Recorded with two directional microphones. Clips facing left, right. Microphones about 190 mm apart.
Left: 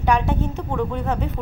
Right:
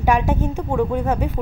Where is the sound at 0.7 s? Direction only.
15° right (ahead or behind).